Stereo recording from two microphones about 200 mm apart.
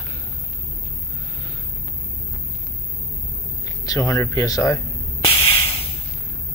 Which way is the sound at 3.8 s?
15° left (ahead or behind).